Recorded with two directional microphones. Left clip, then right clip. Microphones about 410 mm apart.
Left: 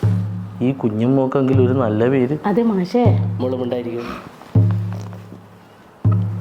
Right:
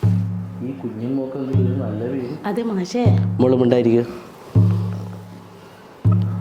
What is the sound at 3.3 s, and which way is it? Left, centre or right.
Speech, right.